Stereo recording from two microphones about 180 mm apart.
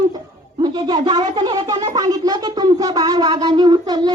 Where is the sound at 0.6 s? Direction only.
25° right (ahead or behind).